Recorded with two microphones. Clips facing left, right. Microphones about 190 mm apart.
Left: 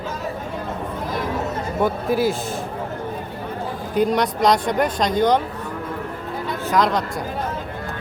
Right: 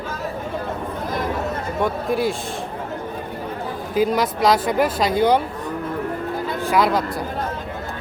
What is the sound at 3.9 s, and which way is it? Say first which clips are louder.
Speech: even; 5° right (ahead or behind).